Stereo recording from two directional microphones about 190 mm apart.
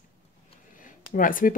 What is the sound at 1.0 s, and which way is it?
Speech, 45° left (ahead or behind).